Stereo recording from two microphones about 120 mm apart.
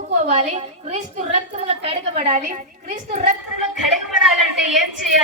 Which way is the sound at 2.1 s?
80° right.